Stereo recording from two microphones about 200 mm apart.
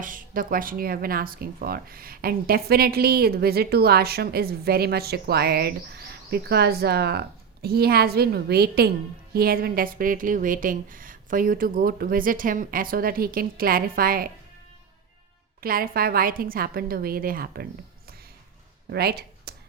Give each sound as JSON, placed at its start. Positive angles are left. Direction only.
{"t": 0.0, "sound": "speech", "side_deg": -45}
{"t": 15.6, "sound": "speech", "side_deg": -45}
{"t": 18.9, "sound": "a sound", "side_deg": -50}